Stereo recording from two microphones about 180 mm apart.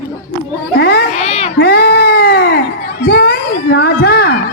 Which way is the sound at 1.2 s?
35° left (ahead or behind).